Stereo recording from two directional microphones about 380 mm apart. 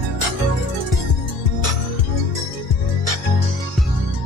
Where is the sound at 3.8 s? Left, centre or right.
Centre.